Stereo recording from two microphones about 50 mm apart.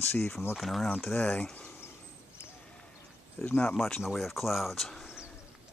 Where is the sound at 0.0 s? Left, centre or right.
Left.